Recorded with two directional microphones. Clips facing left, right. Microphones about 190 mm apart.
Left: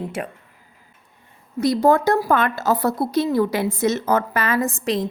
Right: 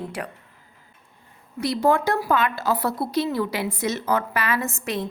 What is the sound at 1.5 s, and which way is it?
A woman's voice, 45° left (ahead or behind).